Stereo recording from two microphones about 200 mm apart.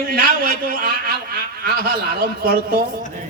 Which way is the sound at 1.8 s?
50° right (ahead or behind).